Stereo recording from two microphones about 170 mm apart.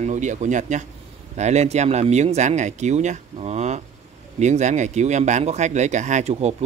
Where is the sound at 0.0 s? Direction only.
45° right (ahead or behind).